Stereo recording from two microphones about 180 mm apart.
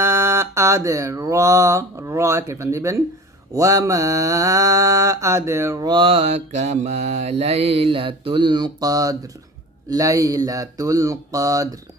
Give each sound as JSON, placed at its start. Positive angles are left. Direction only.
{"t": 0.0, "sound": "mantra", "side_deg": -15}